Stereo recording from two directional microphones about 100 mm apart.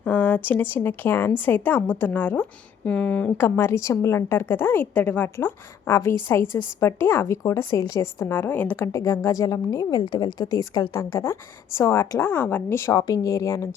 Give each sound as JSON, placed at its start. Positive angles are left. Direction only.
{"t": 0.0, "sound": "a woman's voice", "side_deg": 15}